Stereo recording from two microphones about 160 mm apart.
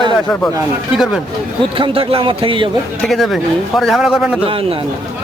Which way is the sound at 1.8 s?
35° right (ahead or behind).